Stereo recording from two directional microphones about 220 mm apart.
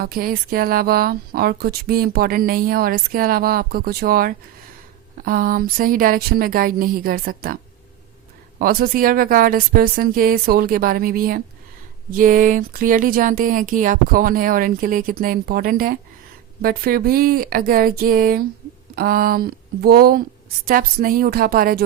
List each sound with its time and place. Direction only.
0.0 s speech: 40° right (ahead or behind)